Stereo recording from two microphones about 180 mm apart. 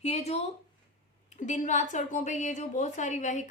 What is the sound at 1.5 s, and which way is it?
A woman's voice, 40° left (ahead or behind).